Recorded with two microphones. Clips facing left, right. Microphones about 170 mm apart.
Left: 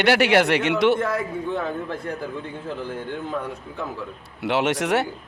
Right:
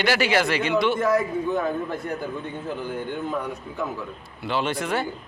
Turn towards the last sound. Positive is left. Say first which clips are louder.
# left 4 dB
turn(degrees=80)